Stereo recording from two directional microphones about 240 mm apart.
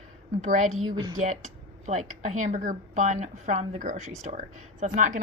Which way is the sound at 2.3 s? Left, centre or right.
Right.